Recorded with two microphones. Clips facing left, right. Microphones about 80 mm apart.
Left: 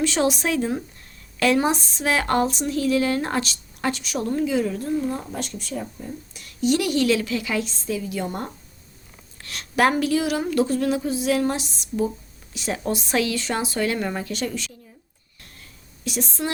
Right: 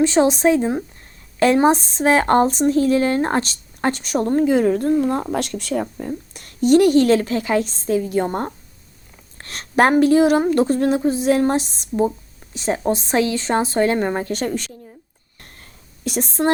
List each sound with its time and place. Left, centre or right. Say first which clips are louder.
0.0 s a woman's voice: right 7 dB; right
6.3 s a woman's voice: right 8 dB; right
15.4 s a sound: right 3 dB; right